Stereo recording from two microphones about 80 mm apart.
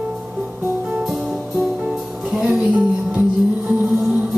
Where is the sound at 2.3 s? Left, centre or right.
Centre.